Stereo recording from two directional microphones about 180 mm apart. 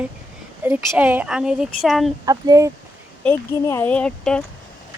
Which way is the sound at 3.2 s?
10° left (ahead or behind).